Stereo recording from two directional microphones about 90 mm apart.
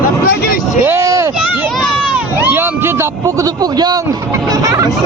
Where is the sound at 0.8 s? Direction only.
25° right (ahead or behind).